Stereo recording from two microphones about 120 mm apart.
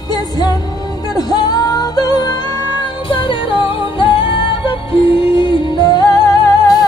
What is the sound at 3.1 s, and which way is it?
Music, 45° left (ahead or behind).